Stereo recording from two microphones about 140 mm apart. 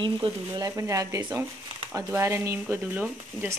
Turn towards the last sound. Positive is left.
turn(degrees=-15)  # may be behind; listen again after turning